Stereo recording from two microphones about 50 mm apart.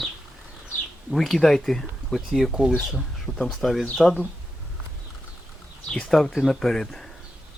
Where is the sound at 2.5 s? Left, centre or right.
Centre.